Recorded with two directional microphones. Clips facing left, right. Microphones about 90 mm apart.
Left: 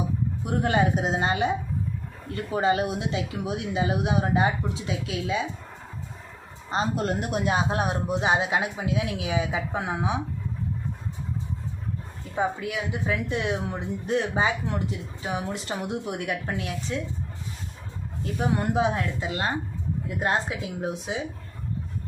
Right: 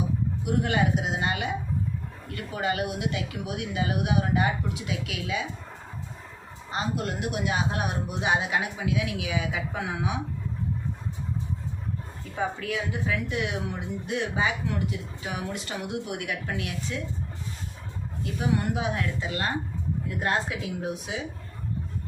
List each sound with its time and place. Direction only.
0.6 s speech: 35° left (ahead or behind)
6.7 s speech: 30° left (ahead or behind)
12.4 s a woman's voice: 15° left (ahead or behind)
13.1 s speech: 30° left (ahead or behind)
18.2 s speech: 35° left (ahead or behind)